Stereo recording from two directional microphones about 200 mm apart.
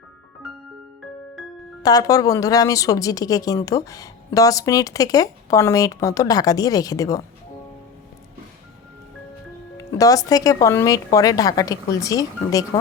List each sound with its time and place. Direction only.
1.8 s a woman's voice: 20° left (ahead or behind)
9.7 s a woman's voice: 15° left (ahead or behind)